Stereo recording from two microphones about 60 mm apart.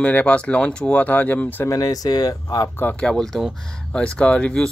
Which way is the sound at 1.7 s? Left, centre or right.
Left.